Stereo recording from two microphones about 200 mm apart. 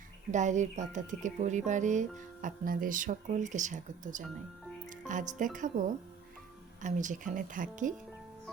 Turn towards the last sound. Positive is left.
turn(degrees=-40)  # may be behind; listen again after turning